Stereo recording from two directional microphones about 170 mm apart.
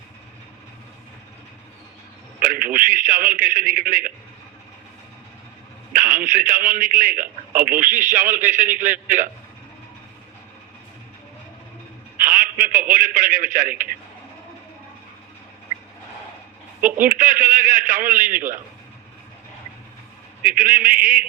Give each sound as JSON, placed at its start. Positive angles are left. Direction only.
{"t": 2.4, "sound": "a man's voice", "side_deg": -55}
{"t": 5.9, "sound": "a man's voice", "side_deg": -55}
{"t": 12.1, "sound": "a sound", "side_deg": -55}
{"t": 16.8, "sound": "a man's voice", "side_deg": -55}
{"t": 20.4, "sound": "a man's voice", "side_deg": -55}